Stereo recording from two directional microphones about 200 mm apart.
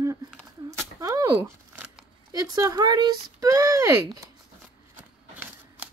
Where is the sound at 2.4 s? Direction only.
20° right (ahead or behind).